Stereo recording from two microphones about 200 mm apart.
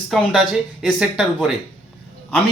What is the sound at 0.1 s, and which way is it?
Speech, centre (ahead or behind).